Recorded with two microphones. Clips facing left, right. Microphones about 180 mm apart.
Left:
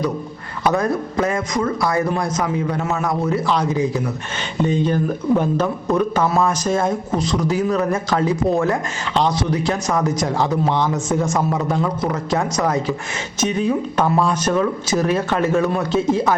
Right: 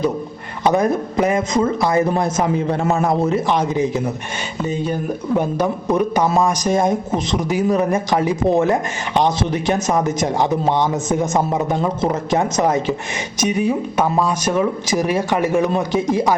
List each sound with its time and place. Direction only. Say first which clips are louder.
0.6 s speech: right 2 dB; 20° right (ahead or behind)
4.6 s a man's voice: left 3 dB; 10° right (ahead or behind)
13.4 s a man's voice: right 1 dB; 10° right (ahead or behind)